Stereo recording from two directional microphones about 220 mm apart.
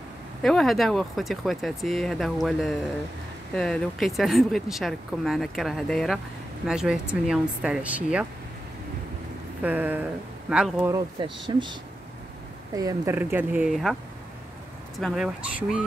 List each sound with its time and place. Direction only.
0.4 s speech: centre (ahead or behind)
9.6 s speech: 5° right (ahead or behind)
11.1 s speech: 20° right (ahead or behind); by 13.9 s centre (ahead or behind)
15.0 s speech: centre (ahead or behind)